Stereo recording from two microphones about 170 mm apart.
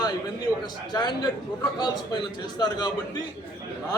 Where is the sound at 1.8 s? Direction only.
25° left (ahead or behind).